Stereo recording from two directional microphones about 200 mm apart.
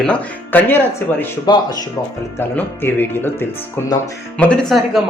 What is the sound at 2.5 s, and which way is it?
Speech, 10° left (ahead or behind).